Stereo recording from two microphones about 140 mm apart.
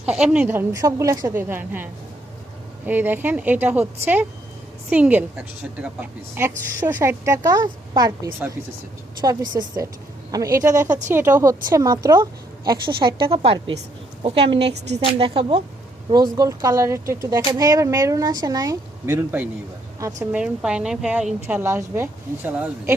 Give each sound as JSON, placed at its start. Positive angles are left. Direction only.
{"t": 0.0, "sound": "a woman's voice", "side_deg": -10}
{"t": 10.8, "sound": "a woman's voice", "side_deg": -10}
{"t": 16.1, "sound": "a woman's voice", "side_deg": -25}
{"t": 20.3, "sound": "a woman's voice", "side_deg": -5}